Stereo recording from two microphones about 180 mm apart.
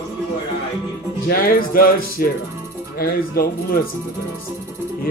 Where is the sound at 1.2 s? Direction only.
55° left (ahead or behind).